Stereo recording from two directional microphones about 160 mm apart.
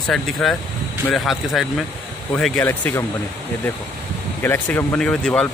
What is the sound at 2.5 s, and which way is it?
Speech, 15° left (ahead or behind).